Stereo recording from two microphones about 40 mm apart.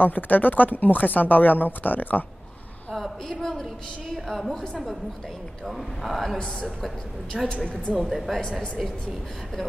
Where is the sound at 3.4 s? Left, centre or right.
Centre.